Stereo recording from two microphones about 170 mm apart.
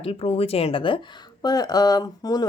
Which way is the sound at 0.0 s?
35° left (ahead or behind).